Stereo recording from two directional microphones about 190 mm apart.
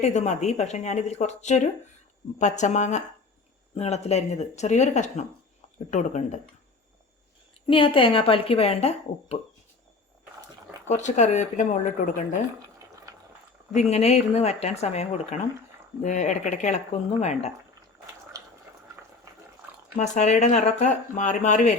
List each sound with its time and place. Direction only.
0.0 s speech: 35° left (ahead or behind)
7.7 s a woman's voice: 25° left (ahead or behind)
10.8 s speech: 40° left (ahead or behind)
13.7 s speech: 35° left (ahead or behind)
18.3 s a sound: 20° right (ahead or behind)
19.3 s dog: 15° right (ahead or behind)
20.0 s speech: 35° left (ahead or behind)